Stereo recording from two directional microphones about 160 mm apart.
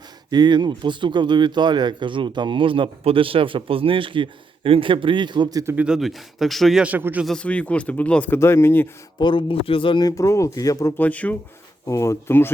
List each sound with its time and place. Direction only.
0.3 s speech: 25° right (ahead or behind)
5.7 s speech: 5° right (ahead or behind)
7.3 s speech: 5° left (ahead or behind)
9.1 s speech: 30° left (ahead or behind); by 12.5 s 15° left (ahead or behind)